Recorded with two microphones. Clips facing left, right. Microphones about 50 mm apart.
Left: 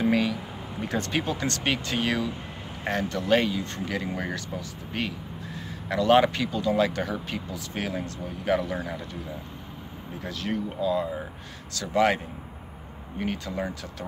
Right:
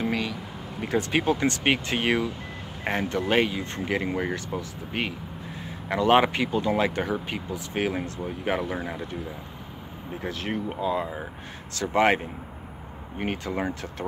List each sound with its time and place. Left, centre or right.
0.0 s a sound: centre
0.9 s speech: centre
1.3 s speech: right
10.2 s speech: right
13.2 s speech: right